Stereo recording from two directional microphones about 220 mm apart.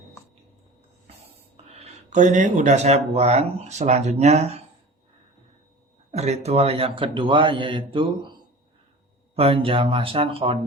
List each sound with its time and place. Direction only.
1.7 s speech: 30° right (ahead or behind)
6.1 s speech: 30° right (ahead or behind)